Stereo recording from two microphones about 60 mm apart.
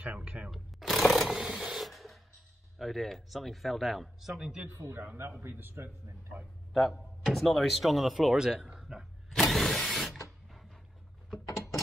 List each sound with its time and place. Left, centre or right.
0.0 s speech: right
0.5 s a sound: centre
1.3 s a sound: centre
2.8 s speech: centre
4.7 s a man's voice: right
5.4 s a man's voice: right
6.7 s speech: centre
9.3 s mechanisms: centre
10.5 s a sound: centre